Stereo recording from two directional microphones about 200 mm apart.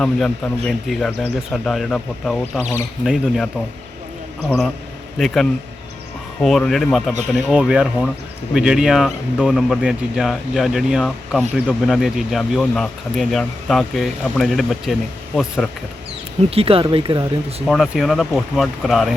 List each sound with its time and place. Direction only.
0.0 s speech: 5° left (ahead or behind)
5.1 s speech: centre (ahead or behind)
16.5 s speech: 30° right (ahead or behind)
17.7 s speech: centre (ahead or behind)